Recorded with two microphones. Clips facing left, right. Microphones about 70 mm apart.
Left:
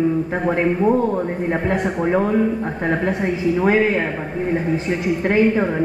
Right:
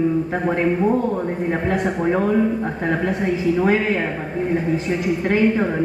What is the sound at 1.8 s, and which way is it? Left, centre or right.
Speech, centre.